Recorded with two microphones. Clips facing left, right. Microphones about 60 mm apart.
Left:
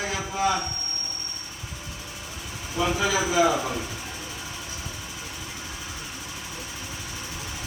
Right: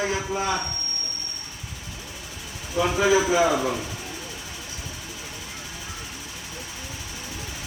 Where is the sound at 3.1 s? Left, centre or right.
Right.